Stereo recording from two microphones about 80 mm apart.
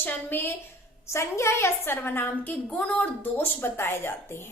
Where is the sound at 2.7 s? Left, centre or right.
Centre; by 4.1 s left.